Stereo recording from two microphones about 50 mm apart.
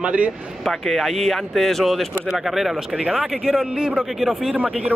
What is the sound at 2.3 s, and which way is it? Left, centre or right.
Speech, centre.